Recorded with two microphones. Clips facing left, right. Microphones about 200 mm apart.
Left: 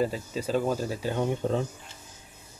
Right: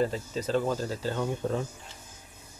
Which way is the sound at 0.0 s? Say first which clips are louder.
Even; 10° left (ahead or behind).